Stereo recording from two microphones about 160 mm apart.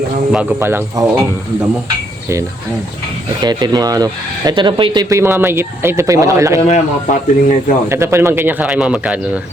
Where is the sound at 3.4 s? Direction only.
25° right (ahead or behind).